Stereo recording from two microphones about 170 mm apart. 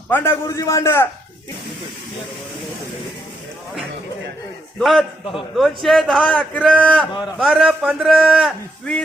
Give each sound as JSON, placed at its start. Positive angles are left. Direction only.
{"t": 0.1, "sound": "a man's voice", "side_deg": 15}
{"t": 4.8, "sound": "a man's voice", "side_deg": 0}